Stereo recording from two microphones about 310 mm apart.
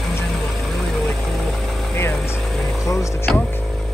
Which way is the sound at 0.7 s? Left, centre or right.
Centre.